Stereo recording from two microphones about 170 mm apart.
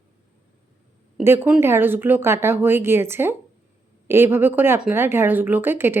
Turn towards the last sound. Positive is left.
turn(degrees=-15)  # may be behind; listen again after turning